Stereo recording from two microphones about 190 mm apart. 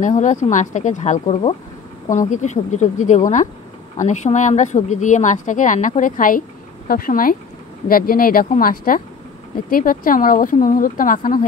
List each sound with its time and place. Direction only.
0.0 s a woman's voice: 40° left (ahead or behind)